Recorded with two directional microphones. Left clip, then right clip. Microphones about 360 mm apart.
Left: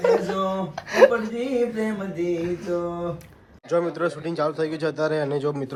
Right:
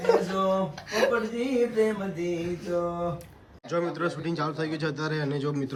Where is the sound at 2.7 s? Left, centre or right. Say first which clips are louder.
Left 1 dB; centre.